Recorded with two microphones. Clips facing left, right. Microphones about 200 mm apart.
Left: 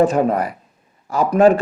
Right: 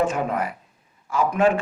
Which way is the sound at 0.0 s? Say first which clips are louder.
Left 7 dB; 35° left (ahead or behind).